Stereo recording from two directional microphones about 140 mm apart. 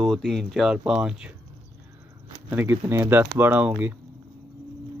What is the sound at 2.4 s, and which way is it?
Speech, 15° right (ahead or behind).